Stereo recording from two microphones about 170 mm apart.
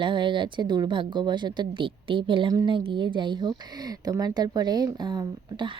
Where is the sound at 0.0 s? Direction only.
30° right (ahead or behind).